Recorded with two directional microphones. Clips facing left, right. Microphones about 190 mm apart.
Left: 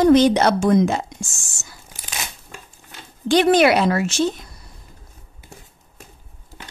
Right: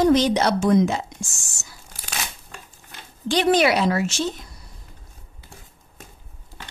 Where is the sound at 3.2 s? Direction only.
50° left (ahead or behind).